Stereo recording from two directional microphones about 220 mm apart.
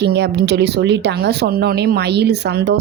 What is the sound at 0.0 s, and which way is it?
A woman's voice, 50° right (ahead or behind).